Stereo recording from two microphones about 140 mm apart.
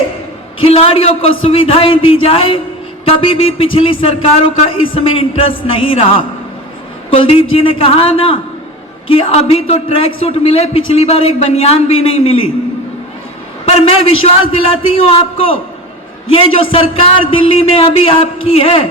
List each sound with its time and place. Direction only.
0.6 s a man's voice: 45° left (ahead or behind)
13.7 s a woman's voice: 45° left (ahead or behind)